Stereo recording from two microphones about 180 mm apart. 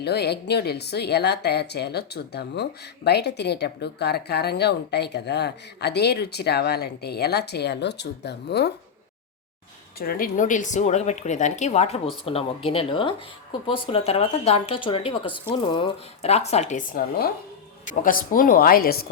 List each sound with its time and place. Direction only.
0.0 s a woman's voice: 65° left (ahead or behind)
10.0 s a woman's voice: 55° left (ahead or behind)